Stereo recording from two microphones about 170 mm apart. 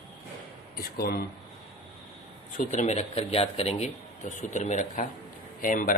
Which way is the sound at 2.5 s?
45° left (ahead or behind).